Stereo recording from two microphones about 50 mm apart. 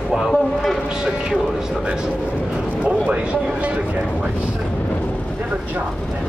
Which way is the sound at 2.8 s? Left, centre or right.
Right.